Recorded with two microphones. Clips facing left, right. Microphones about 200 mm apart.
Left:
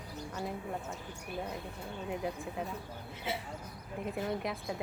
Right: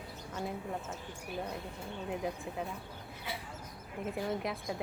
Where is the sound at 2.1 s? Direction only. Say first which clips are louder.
Even; centre (ahead or behind).